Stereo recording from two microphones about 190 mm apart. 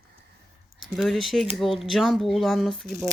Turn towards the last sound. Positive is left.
turn(degrees=0)  # may be behind; listen again after turning